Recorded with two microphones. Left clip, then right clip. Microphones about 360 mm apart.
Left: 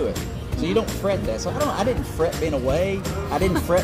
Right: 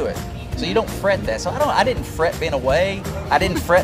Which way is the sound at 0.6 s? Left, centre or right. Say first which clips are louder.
Right 2 dB; right.